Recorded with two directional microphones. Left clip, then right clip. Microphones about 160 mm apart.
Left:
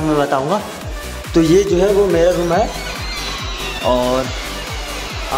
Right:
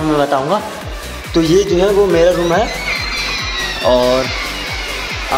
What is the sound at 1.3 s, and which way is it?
Speech, 30° left (ahead or behind).